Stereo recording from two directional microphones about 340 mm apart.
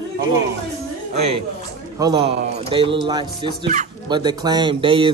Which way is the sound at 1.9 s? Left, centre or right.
Centre.